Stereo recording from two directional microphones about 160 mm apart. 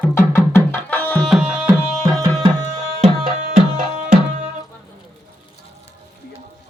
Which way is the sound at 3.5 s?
50° right (ahead or behind).